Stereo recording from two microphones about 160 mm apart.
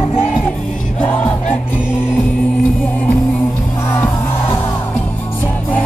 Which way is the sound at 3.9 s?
15° left (ahead or behind).